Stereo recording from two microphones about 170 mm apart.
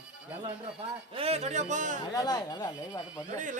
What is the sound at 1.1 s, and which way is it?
Speech, 35° right (ahead or behind).